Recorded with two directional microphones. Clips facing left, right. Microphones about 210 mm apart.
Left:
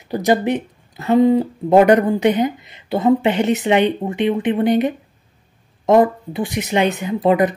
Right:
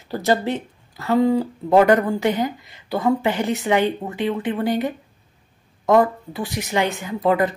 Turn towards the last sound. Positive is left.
turn(degrees=20)  # may be behind; listen again after turning